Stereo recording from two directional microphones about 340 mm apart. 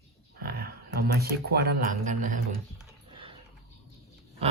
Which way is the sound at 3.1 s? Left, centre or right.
Centre.